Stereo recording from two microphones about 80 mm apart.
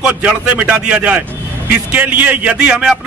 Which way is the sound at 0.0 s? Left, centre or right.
Centre.